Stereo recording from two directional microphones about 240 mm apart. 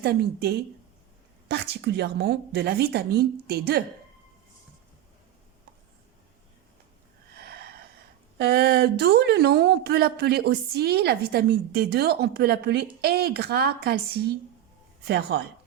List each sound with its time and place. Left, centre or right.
0.0 s a woman's voice: right
7.3 s a sound: right
8.4 s speech: right
15.0 s a woman's voice: right